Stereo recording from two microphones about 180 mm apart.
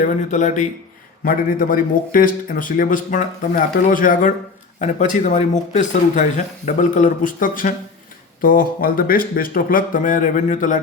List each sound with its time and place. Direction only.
0.0 s a man's voice: 45° left (ahead or behind)